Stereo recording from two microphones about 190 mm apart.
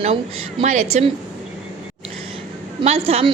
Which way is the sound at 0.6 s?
35° right (ahead or behind).